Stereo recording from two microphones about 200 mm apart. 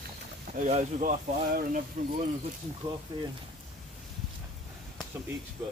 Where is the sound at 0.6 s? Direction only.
35° right (ahead or behind).